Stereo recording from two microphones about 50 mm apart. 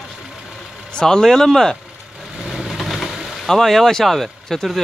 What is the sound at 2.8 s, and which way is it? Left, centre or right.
Vehicle, centre.